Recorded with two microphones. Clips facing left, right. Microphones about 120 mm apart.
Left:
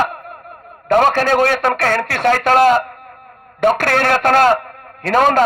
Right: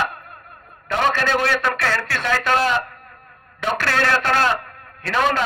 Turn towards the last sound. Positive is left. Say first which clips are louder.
# left 7 dB
turn(degrees=45)  # may be behind; listen again after turning